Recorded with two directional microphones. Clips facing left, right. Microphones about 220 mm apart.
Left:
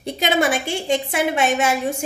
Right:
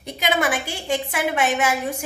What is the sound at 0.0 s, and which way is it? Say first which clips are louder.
A woman's voice: left 3 dB; 25° left (ahead or behind).